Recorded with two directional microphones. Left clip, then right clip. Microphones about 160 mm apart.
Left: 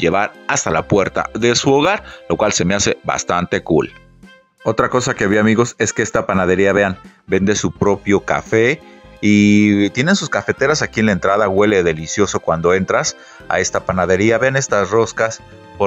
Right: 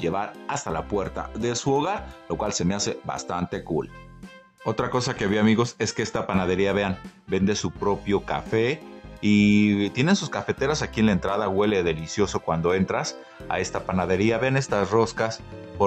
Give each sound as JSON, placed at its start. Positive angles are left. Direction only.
{"t": 0.0, "sound": "speech", "side_deg": 30}